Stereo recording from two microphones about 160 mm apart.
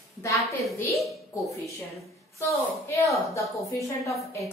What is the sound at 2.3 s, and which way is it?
A woman's voice, 20° left (ahead or behind).